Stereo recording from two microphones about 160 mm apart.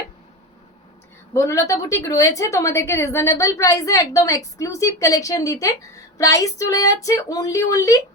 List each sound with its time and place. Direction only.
1.3 s a woman's voice: 20° left (ahead or behind)